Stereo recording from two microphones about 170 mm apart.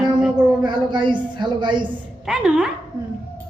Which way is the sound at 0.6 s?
25° right (ahead or behind).